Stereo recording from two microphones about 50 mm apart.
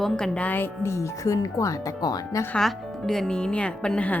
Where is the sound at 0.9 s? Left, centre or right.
Left.